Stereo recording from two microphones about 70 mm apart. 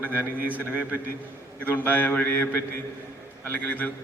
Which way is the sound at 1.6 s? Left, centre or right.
Left.